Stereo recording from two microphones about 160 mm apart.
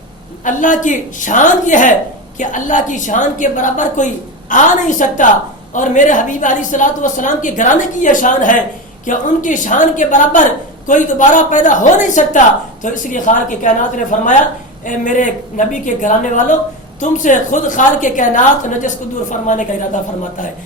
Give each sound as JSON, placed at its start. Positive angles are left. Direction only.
{"t": 0.4, "sound": "a woman's voice", "side_deg": 55}